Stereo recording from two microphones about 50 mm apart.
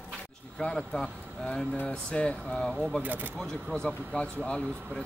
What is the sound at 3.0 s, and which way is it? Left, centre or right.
Speech, right.